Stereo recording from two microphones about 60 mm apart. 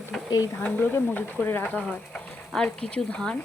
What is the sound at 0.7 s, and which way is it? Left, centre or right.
Speech, left.